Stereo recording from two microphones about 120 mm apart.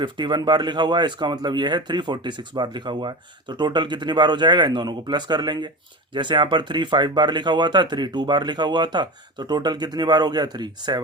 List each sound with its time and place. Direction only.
0.0 s speech: 40° right (ahead or behind)